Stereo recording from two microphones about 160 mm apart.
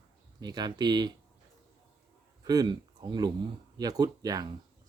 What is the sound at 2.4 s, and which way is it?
Speech, 25° right (ahead or behind).